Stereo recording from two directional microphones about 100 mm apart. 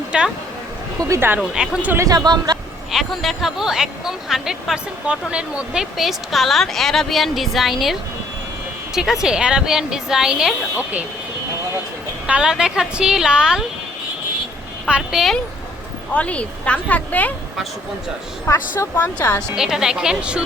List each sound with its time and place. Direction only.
0.1 s speech: 10° right (ahead or behind)
0.9 s speech: 30° right (ahead or behind)
1.4 s speech: 5° right (ahead or behind)
2.0 s speech: 40° right (ahead or behind)
2.9 s speech: centre (ahead or behind)
9.0 s speech: 5° right (ahead or behind)
12.2 s speech: 10° right (ahead or behind)
14.8 s speech: 5° right (ahead or behind)
16.1 s speech: 15° left (ahead or behind)
18.4 s speech: 25° left (ahead or behind)
19.5 s speech: 5° right (ahead or behind)